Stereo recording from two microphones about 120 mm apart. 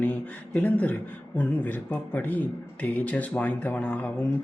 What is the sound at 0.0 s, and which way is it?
A man's voice, 15° left (ahead or behind).